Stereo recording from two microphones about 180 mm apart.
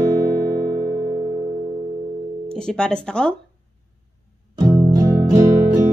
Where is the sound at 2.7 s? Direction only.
5° left (ahead or behind).